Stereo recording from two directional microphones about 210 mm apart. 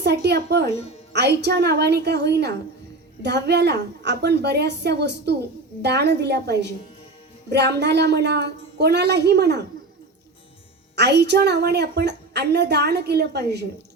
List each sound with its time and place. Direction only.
0.0 s a woman's voice: 55° right (ahead or behind)
0.7 s speech: 30° left (ahead or behind)
1.1 s a woman's voice: 55° right (ahead or behind)
10.9 s a woman's voice: 55° right (ahead or behind)